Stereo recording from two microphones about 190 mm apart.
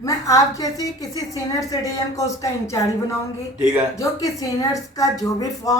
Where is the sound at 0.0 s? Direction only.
20° left (ahead or behind).